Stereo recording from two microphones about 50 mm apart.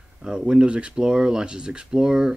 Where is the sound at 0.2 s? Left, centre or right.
Centre.